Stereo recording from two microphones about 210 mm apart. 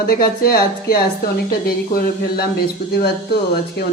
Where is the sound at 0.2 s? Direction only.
45° left (ahead or behind).